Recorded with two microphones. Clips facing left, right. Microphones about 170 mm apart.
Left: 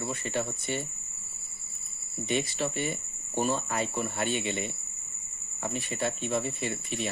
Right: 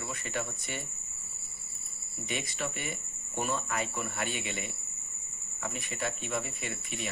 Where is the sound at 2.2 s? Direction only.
30° left (ahead or behind).